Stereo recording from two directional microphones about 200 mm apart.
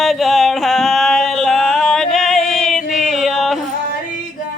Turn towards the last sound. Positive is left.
turn(degrees=0)  # may be behind; listen again after turning